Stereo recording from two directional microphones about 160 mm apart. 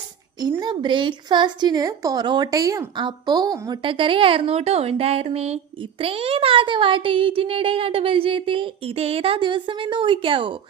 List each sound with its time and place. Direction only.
0.6 s a child's voice: 30° right (ahead or behind)